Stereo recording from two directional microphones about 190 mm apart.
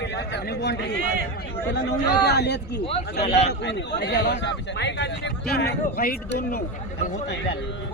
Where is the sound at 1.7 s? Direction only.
60° left (ahead or behind).